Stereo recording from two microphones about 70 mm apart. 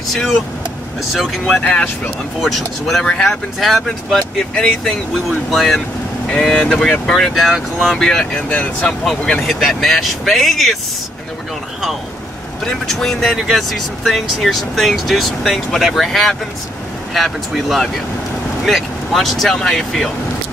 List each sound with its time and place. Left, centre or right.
1.1 s speech: centre
1.6 s speech: centre
2.4 s speech: centre
5.5 s speech: centre
7.9 s speech: centre
8.4 s speech: centre
9.0 s speech: centre
12.6 s speech: centre